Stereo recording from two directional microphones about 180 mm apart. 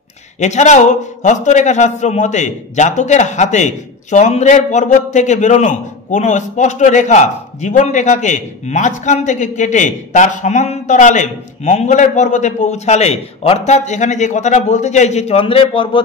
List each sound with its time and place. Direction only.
0.4 s a man's voice: 40° left (ahead or behind)